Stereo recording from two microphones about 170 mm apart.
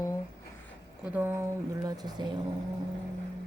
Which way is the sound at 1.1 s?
10° right (ahead or behind).